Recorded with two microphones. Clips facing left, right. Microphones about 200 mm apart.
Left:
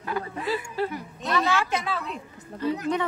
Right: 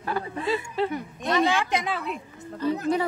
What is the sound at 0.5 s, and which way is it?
A woman's voice, 20° right (ahead or behind).